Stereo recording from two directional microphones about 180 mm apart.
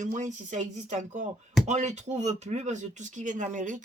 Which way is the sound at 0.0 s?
45° right (ahead or behind).